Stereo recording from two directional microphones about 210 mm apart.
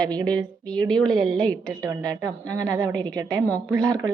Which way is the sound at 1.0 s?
5° left (ahead or behind).